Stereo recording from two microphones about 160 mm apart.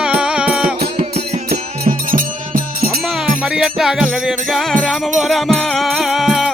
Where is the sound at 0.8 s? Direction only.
75° right (ahead or behind).